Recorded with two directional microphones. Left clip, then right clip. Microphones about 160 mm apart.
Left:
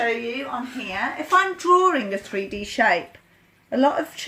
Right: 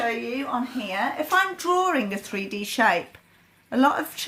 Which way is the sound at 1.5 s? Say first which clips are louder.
Left 5 dB; 45° right (ahead or behind).